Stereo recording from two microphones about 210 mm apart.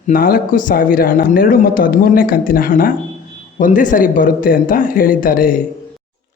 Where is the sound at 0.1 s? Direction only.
45° left (ahead or behind).